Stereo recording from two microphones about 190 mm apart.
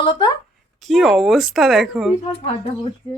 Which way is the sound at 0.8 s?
Centre (ahead or behind).